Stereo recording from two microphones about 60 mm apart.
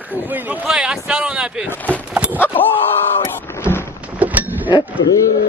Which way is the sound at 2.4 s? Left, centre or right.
Left.